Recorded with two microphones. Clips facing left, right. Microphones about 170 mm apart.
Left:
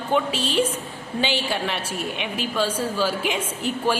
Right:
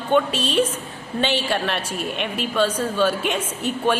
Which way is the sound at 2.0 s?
65° right (ahead or behind).